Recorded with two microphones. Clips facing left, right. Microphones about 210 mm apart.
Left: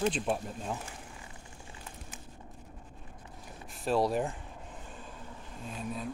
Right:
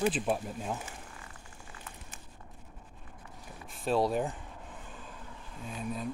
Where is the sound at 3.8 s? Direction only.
Centre (ahead or behind).